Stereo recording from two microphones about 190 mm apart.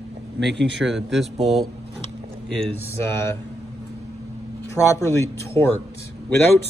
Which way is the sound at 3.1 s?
15° left (ahead or behind).